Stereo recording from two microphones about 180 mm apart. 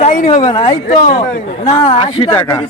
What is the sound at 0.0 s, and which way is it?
A man's voice, 40° left (ahead or behind).